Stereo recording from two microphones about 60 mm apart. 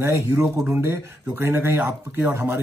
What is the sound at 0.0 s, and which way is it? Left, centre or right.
A man's voice, right.